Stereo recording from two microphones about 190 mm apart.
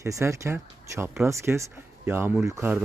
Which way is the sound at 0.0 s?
15° right (ahead or behind).